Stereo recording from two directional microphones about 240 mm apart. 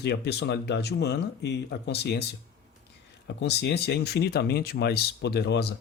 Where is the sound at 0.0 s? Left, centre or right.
Left.